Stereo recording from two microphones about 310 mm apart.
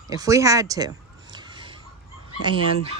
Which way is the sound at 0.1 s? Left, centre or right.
Centre.